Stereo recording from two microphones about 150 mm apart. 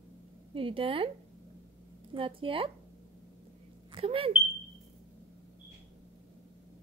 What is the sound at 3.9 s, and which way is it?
Speech, 35° right (ahead or behind).